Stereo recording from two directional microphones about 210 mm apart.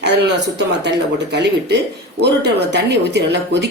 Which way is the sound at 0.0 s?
55° right (ahead or behind).